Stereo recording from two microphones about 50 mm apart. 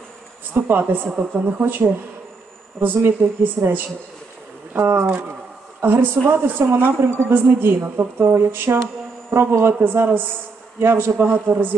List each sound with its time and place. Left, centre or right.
0.5 s a woman's voice: right